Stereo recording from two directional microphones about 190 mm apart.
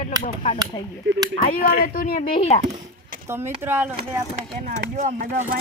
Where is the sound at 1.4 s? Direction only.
45° left (ahead or behind).